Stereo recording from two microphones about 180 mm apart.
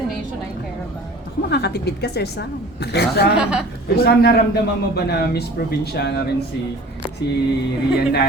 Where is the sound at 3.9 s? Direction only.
65° left (ahead or behind).